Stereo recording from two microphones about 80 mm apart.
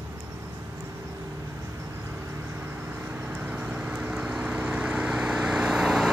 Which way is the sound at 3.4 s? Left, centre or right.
Centre.